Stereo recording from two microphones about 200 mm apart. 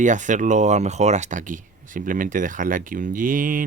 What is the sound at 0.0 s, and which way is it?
Speech, 40° right (ahead or behind).